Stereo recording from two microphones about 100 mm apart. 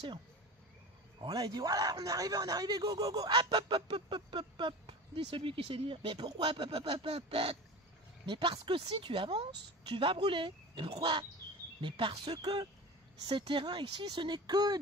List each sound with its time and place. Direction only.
1.2 s speech: 40° right (ahead or behind); by 7.5 s 70° right (ahead or behind)
8.3 s speech: 55° right (ahead or behind)